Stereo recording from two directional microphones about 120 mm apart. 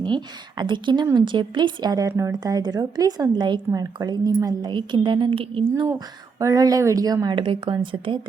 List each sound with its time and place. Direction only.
0.0 s a woman's voice: 40° right (ahead or behind)
6.4 s a woman's voice: 30° right (ahead or behind)